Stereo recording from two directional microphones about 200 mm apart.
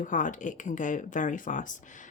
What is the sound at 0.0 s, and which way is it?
Speech, 40° left (ahead or behind).